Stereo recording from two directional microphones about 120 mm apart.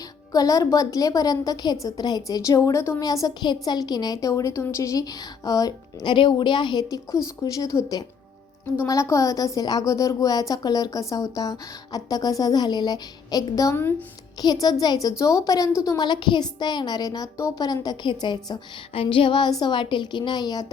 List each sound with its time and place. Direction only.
0.3 s a woman's voice: 30° left (ahead or behind)
18.9 s a woman's voice: 50° left (ahead or behind)